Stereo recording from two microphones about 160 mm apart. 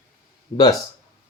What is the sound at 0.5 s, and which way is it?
Music, 25° left (ahead or behind).